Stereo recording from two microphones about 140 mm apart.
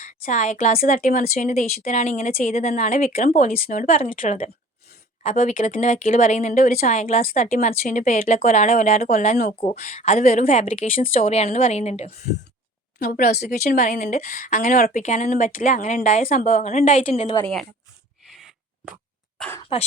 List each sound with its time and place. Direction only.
0.0 s a woman's voice: 65° left (ahead or behind)
0.8 s speech: 80° left
3.3 s speech: 60° left (ahead or behind); by 4.4 s 80° left
5.2 s speech: 60° left (ahead or behind); by 8.4 s 80° left
8.4 s speech: 65° left (ahead or behind)
9.9 s a woman's voice: 50° left (ahead or behind)
10.2 s speech: 75° left (ahead or behind)
11.3 s a woman's voice: 50° left (ahead or behind)
13.0 s a woman's voice: 65° left (ahead or behind)
19.7 s speech: 40° left (ahead or behind)